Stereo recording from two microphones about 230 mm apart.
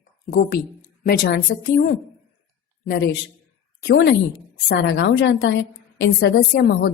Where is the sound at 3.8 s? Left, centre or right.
Left.